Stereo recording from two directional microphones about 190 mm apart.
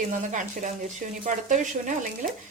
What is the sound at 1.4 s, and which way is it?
Speech, 40° right (ahead or behind).